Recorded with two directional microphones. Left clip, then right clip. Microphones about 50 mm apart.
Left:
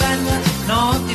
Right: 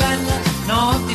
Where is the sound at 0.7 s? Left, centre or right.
Centre.